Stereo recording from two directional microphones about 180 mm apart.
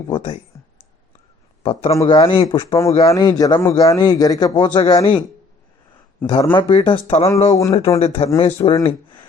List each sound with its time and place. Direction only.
1.9 s a man's voice: 20° left (ahead or behind)
6.2 s a man's voice: 25° left (ahead or behind)
7.3 s a man's voice: 20° left (ahead or behind)
7.9 s speech: 35° left (ahead or behind)